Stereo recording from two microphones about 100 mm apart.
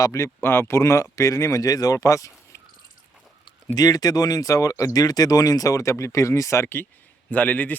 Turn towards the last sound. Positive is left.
turn(degrees=15)  # may be behind; listen again after turning